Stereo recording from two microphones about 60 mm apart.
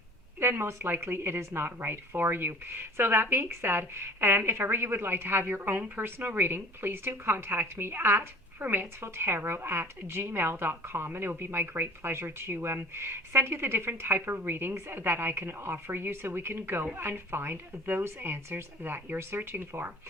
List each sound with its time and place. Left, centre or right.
0.3 s a woman's voice: right